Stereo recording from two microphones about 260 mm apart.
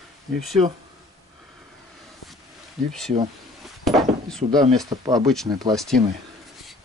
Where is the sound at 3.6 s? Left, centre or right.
Centre.